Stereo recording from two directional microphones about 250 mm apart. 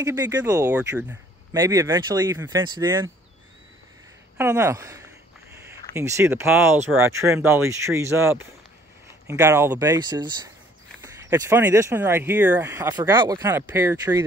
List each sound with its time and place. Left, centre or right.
0.0 s speech: centre
4.4 s speech: centre